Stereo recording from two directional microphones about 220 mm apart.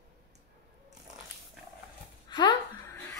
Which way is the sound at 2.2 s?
20° left (ahead or behind).